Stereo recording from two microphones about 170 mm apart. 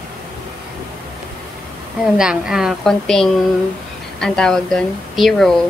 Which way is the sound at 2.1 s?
5° right (ahead or behind).